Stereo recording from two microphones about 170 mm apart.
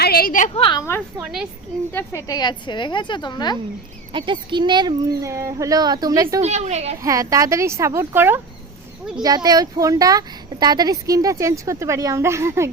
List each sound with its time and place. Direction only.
0.0 s a woman's voice: 60° left (ahead or behind)
0.5 s a woman's voice: 30° left (ahead or behind)
1.2 s speech: 5° right (ahead or behind)
1.9 s a woman's voice: 15° left (ahead or behind)
4.1 s speech: 30° right (ahead or behind)
6.4 s a woman's voice: 40° right (ahead or behind)
7.0 s speech: 20° right (ahead or behind)